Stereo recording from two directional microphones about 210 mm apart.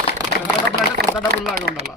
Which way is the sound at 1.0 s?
50° right (ahead or behind).